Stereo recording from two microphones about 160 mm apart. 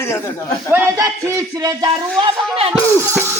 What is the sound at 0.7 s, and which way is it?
A woman's voice, 20° right (ahead or behind).